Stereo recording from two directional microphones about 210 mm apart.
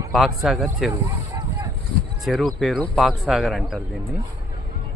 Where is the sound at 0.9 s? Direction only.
15° right (ahead or behind).